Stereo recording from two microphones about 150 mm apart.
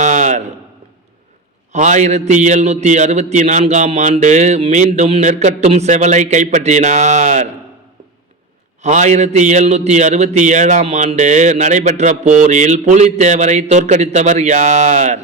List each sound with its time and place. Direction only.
0.0 s a sound: 55° right (ahead or behind)
1.7 s a man's voice: 55° right (ahead or behind)
8.8 s a man's voice: 50° right (ahead or behind)